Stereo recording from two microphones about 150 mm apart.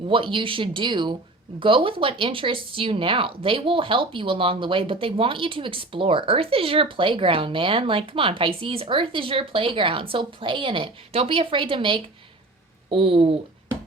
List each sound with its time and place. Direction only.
0.1 s speech: 35° right (ahead or behind)